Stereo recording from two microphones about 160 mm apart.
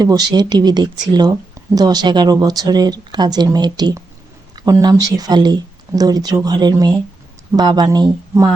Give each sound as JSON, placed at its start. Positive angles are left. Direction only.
{"t": 0.0, "sound": "speech", "side_deg": -25}